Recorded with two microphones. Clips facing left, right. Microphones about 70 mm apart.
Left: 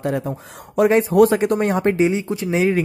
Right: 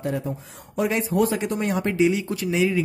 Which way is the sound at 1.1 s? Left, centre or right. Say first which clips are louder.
Left 8 dB; left.